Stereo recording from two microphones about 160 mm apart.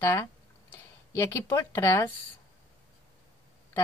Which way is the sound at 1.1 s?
15° left (ahead or behind).